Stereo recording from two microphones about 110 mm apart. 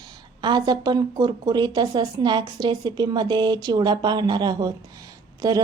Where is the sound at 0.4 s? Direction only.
40° right (ahead or behind).